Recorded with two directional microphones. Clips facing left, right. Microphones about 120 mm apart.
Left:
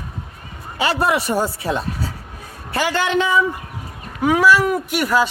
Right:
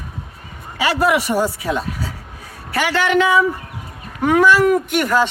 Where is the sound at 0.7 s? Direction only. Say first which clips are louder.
Right 2 dB; 30° left (ahead or behind).